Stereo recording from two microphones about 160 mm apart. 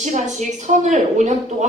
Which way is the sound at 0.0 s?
50° right (ahead or behind).